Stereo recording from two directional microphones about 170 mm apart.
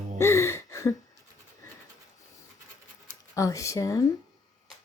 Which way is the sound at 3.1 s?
20° left (ahead or behind).